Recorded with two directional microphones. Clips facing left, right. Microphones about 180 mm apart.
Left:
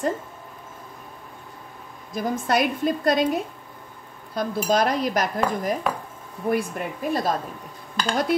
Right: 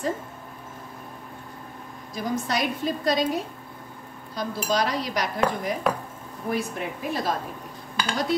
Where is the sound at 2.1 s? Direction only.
55° left (ahead or behind).